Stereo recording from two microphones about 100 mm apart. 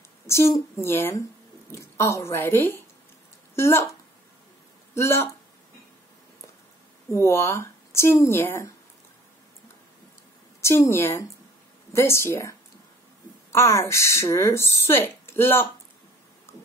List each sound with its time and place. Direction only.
0.3 s a woman's voice: 25° left (ahead or behind)
4.9 s a woman's voice: 25° left (ahead or behind)
7.1 s a woman's voice: 30° left (ahead or behind)
10.6 s a woman's voice: 30° left (ahead or behind)
16.5 s a sound: 25° left (ahead or behind)